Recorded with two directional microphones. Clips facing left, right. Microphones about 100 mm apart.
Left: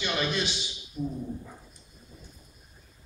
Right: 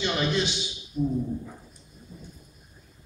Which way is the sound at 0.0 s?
20° right (ahead or behind).